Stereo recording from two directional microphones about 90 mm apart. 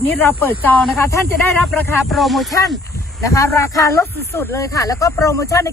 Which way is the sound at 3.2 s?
35° left (ahead or behind).